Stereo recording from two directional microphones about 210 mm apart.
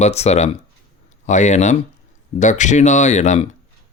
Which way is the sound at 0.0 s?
30° left (ahead or behind).